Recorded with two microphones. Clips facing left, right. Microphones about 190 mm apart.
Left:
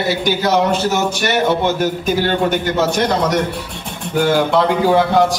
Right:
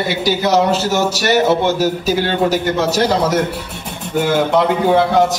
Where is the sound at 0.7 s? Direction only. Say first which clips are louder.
Right 1 dB; 5° right (ahead or behind).